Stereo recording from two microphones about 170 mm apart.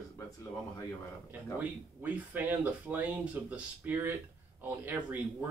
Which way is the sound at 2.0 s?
10° right (ahead or behind).